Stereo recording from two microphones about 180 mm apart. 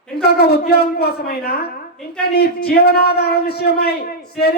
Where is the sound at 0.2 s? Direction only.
60° left (ahead or behind).